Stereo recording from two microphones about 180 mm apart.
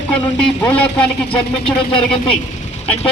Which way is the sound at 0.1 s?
5° left (ahead or behind).